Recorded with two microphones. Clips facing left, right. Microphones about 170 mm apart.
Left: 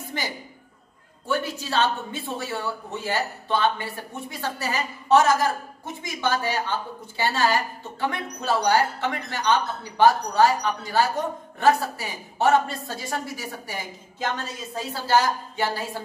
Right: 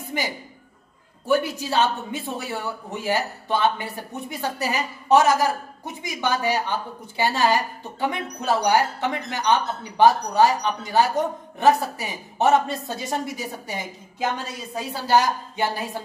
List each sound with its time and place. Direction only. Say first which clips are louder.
0.1 s a man's voice: right 4 dB; 10° right (ahead or behind)